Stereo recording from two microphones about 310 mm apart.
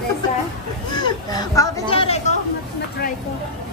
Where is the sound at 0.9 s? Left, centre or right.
Centre.